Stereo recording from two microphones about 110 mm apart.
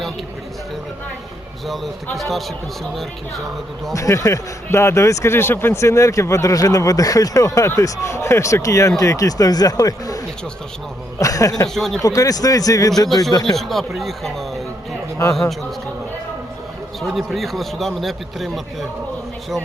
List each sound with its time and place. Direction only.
1.6 s a man's voice: centre (ahead or behind)
3.9 s speech: 30° left (ahead or behind)
11.2 s speech: 30° left (ahead or behind)
11.7 s a man's voice: 5° left (ahead or behind)
12.0 s speech: 30° left (ahead or behind)
13.1 s a man's voice: centre (ahead or behind)
17.0 s a man's voice: centre (ahead or behind)